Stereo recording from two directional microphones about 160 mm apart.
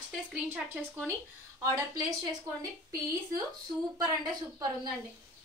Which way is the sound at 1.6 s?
20° right (ahead or behind).